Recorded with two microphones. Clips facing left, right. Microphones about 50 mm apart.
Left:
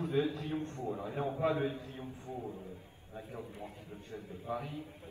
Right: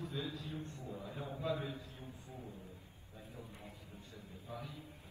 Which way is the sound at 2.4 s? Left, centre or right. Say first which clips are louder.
Left 8 dB; left.